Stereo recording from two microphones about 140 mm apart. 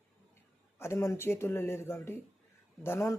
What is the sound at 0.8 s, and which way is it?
Speech, 20° left (ahead or behind).